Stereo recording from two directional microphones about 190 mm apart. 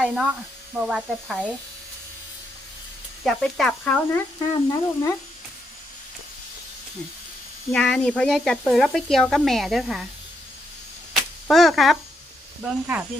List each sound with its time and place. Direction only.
0.0 s speech: 5° right (ahead or behind)
3.2 s speech: centre (ahead or behind)
4.4 s speech: 15° left (ahead or behind)
7.7 s speech: 5° left (ahead or behind)
11.1 s a sound: centre (ahead or behind)